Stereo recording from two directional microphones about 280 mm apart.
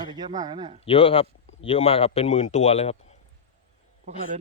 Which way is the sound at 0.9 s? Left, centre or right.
Centre.